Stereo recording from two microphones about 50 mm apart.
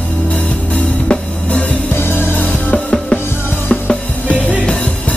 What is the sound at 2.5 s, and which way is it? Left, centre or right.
Music, left.